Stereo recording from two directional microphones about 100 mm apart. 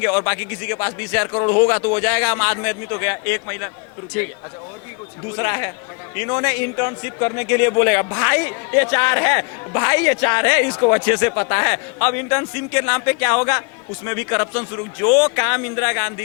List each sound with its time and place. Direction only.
0.0 s a man's voice: 25° left (ahead or behind)
5.4 s a man's voice: 30° left (ahead or behind)